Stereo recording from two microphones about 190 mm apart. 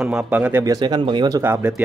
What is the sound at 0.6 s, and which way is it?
Speech, 20° right (ahead or behind).